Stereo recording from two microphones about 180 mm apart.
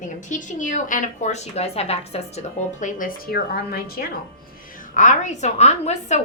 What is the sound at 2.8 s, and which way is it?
A woman's voice, 50° left (ahead or behind).